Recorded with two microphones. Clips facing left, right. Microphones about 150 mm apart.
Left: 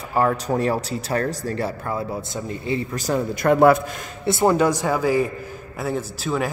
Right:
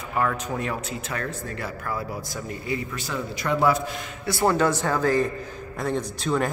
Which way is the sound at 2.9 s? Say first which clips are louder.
Left 8 dB; 40° left (ahead or behind).